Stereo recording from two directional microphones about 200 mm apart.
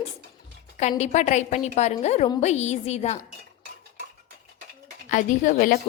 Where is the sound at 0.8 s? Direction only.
35° left (ahead or behind).